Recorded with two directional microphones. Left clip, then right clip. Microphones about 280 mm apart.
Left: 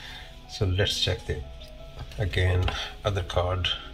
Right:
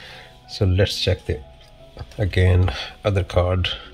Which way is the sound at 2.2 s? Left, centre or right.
Right.